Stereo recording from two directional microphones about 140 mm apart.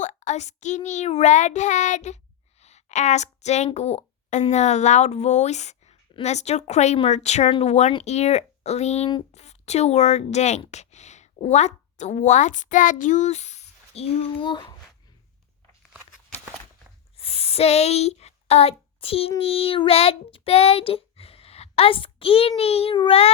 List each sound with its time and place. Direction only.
0.0 s speech: 55° left (ahead or behind)
2.6 s a sound: 50° left (ahead or behind)
3.8 s a woman's voice: 50° left (ahead or behind)
14.4 s a child's voice: 30° left (ahead or behind)
17.2 s a sound: 45° left (ahead or behind)
19.4 s child singing: 45° left (ahead or behind)